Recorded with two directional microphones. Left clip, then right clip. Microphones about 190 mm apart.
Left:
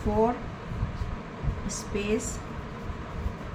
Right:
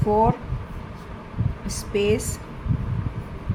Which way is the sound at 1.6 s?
45° right (ahead or behind).